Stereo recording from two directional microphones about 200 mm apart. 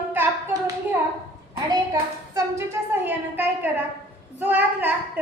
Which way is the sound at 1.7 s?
20° right (ahead or behind).